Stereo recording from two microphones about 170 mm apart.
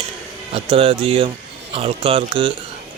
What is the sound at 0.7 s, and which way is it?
A man's voice, 35° right (ahead or behind).